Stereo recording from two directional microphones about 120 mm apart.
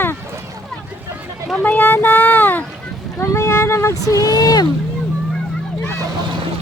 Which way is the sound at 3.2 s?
20° left (ahead or behind).